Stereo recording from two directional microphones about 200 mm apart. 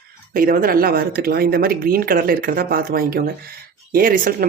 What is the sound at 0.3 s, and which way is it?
Speech, 45° right (ahead or behind).